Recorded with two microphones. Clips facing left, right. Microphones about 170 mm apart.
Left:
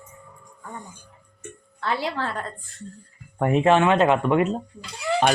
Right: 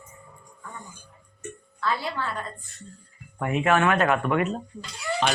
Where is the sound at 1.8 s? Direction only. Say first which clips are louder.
Left 2 dB; 90° left.